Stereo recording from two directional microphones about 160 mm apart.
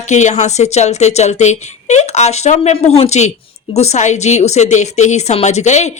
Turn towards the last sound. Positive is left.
turn(degrees=45)  # may be behind; listen again after turning